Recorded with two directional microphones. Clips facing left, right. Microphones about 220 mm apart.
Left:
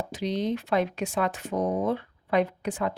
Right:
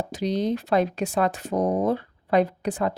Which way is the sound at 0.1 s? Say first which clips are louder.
Right 3 dB; 40° right (ahead or behind).